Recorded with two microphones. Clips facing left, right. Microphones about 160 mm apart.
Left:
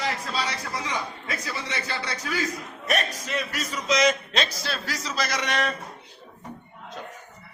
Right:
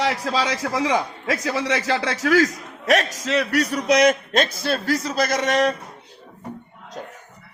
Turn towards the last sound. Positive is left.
turn(degrees=-40)  # may be behind; listen again after turning